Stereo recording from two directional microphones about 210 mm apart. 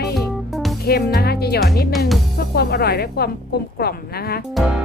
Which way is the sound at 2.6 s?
50° left (ahead or behind).